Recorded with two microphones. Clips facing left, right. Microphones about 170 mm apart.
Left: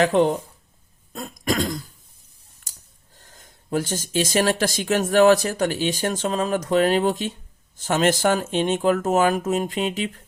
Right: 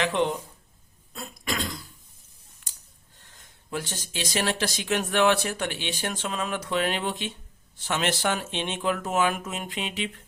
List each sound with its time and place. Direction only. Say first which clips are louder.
0.0 s speech: left 7 dB; 45° left (ahead or behind)
1.1 s throat clearing: left 8 dB; 45° left (ahead or behind)
2.7 s a sound: left 5 dB; 40° left (ahead or behind)
3.2 s speech: left 6 dB; 40° left (ahead or behind)